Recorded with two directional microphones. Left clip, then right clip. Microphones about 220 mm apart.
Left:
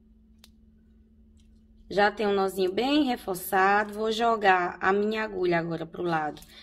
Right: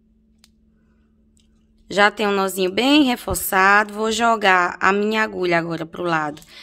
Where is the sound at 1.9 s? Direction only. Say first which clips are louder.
Right 7 dB; 35° right (ahead or behind).